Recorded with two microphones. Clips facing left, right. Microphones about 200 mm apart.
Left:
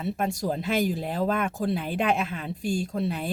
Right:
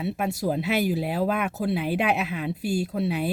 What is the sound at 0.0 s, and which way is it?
A woman's voice, 5° right (ahead or behind).